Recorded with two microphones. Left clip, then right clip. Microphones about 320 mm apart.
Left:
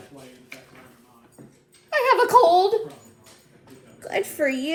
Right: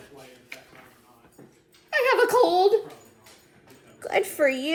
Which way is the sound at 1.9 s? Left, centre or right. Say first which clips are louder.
Left 4 dB; centre.